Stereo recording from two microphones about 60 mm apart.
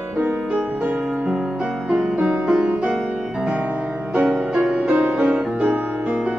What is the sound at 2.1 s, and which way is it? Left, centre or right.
Music, centre.